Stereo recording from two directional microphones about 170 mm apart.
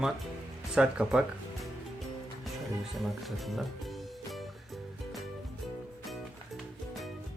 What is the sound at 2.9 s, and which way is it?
Speech, centre (ahead or behind).